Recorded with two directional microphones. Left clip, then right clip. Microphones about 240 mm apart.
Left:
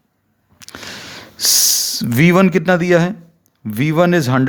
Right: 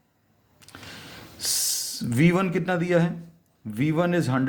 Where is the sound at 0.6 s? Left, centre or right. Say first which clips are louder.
Left 11 dB; left.